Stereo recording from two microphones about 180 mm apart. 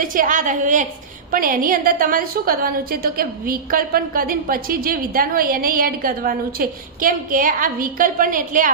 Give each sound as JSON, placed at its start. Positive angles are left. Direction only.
{"t": 0.0, "sound": "a woman's voice", "side_deg": -50}